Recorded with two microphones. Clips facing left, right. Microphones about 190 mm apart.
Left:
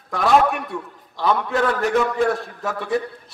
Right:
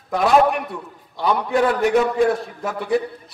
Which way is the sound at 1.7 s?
15° right (ahead or behind).